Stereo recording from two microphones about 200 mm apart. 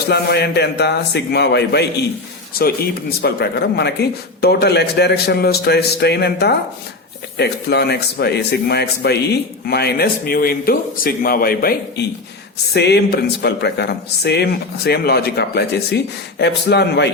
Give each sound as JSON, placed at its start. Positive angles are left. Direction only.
{"t": 0.1, "sound": "a man's voice", "side_deg": 55}
{"t": 3.2, "sound": "a man's voice", "side_deg": 55}